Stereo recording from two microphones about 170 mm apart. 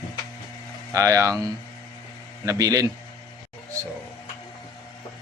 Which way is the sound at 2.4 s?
20° right (ahead or behind).